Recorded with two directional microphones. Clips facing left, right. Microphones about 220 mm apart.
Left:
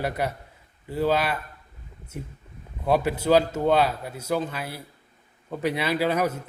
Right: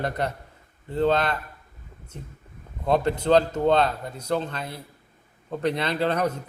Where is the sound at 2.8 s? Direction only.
10° left (ahead or behind).